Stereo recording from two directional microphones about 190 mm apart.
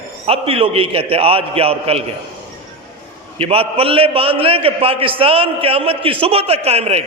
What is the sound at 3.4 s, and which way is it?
A man's voice, 30° right (ahead or behind).